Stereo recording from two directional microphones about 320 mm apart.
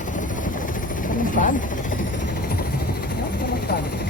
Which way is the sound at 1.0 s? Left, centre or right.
Left.